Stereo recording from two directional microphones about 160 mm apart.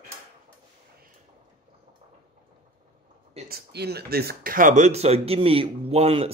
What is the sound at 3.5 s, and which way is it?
Speech, 80° right.